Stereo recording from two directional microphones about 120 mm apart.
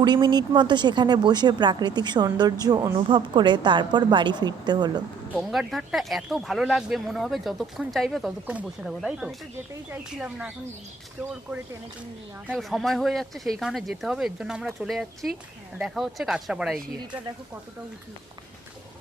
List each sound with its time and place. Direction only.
0.0 s speech: 40° right (ahead or behind)
5.4 s speech: centre (ahead or behind)
8.4 s speech: 10° right (ahead or behind)
8.9 s speech: centre (ahead or behind)
12.5 s speech: centre (ahead or behind)